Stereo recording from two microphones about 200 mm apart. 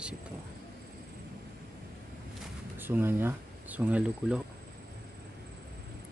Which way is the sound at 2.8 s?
10° right (ahead or behind).